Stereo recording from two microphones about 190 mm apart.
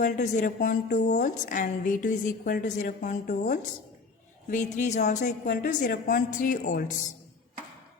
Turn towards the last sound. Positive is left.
turn(degrees=45)  # may be behind; listen again after turning